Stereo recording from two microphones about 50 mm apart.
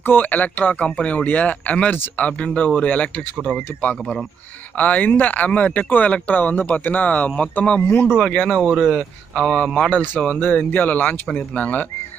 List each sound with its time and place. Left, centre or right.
0.0 s speech: left
4.7 s speech: left
7.8 s speech: left
8.3 s speech: left
8.6 s speech: centre
8.9 s speech: centre
9.8 s speech: left
11.2 s speech: left